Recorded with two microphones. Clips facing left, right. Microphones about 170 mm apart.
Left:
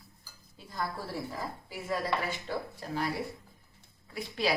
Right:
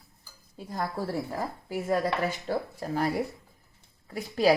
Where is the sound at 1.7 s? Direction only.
50° right (ahead or behind).